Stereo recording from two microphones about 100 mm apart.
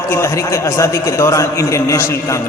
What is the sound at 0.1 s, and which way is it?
A man's voice, 30° left (ahead or behind).